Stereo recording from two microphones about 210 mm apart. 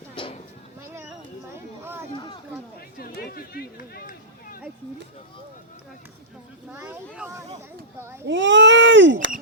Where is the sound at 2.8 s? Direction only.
45° left (ahead or behind).